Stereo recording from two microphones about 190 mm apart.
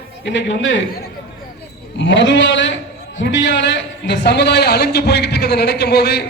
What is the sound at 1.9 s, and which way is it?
A man's voice, 70° left (ahead or behind).